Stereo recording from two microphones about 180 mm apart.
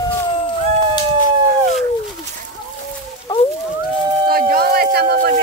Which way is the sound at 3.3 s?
25° left (ahead or behind).